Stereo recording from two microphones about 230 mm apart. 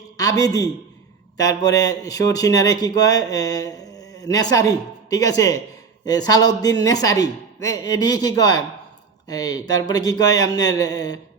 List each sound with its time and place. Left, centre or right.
0.2 s a man's voice: centre